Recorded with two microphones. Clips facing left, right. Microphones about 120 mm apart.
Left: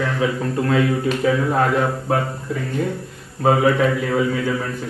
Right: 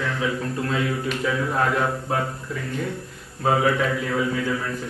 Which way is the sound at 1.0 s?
40° left (ahead or behind).